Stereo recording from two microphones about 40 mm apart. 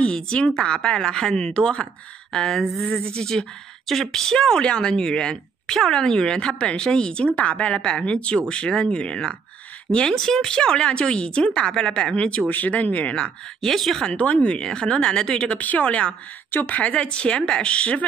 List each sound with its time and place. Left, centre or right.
0.0 s speech: left
2.3 s speech: centre
12.4 s speech: left
12.9 s speech: left
13.6 s speech: centre
14.1 s speech: left
14.6 s speech: centre
15.4 s speech: left
16.5 s speech: left
16.8 s speech: left